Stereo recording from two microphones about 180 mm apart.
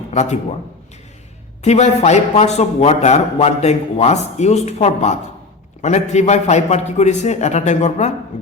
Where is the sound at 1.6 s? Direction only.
40° left (ahead or behind).